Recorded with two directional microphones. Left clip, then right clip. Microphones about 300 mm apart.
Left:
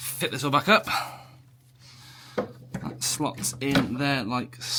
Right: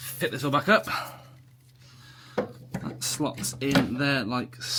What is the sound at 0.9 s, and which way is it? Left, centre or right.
Speech, centre.